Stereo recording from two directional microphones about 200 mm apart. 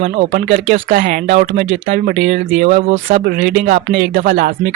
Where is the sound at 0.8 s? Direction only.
45° right (ahead or behind).